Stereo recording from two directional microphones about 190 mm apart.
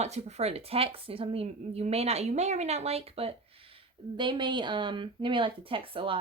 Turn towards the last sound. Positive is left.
turn(degrees=-25)  # may be behind; listen again after turning